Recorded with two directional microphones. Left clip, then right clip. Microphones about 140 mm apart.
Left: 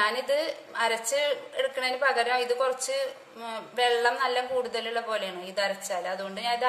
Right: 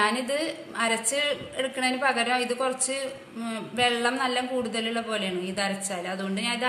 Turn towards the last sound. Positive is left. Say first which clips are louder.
# even
turn(degrees=35)  # may be behind; listen again after turning